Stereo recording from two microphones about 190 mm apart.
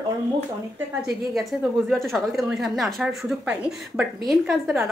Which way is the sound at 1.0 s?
Centre (ahead or behind).